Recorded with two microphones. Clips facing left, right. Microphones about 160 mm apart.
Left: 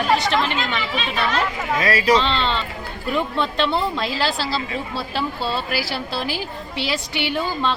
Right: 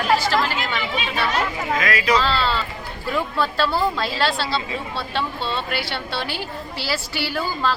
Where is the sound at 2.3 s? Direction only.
5° right (ahead or behind).